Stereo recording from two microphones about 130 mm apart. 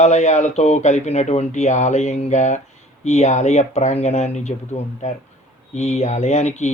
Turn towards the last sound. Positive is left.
turn(degrees=60)  # may be behind; listen again after turning